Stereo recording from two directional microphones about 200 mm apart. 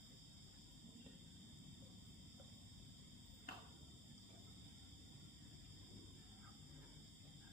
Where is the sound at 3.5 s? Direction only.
50° left (ahead or behind).